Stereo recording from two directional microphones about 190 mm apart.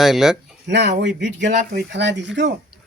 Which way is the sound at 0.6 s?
65° right (ahead or behind).